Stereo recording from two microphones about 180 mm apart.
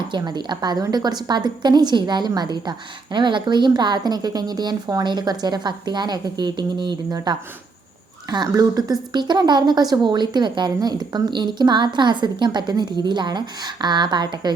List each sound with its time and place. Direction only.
0.1 s a woman's voice: 25° right (ahead or behind)